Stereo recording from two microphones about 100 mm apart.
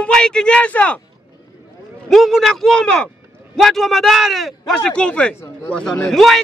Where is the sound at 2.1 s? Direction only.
Centre (ahead or behind).